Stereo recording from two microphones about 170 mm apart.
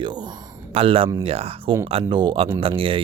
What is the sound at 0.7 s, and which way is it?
Speech, 35° right (ahead or behind).